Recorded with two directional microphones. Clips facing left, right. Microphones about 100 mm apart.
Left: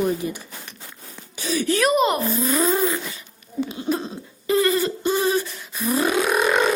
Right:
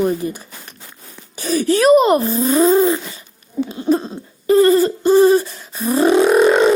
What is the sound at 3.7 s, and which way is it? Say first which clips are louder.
Owl: right 10 dB; 35° right (ahead or behind).